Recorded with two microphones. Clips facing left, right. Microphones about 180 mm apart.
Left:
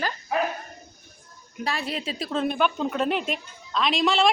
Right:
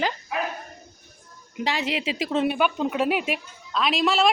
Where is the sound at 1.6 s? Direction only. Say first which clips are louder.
Right 3 dB; 20° right (ahead or behind); by 4.3 s 5° right (ahead or behind).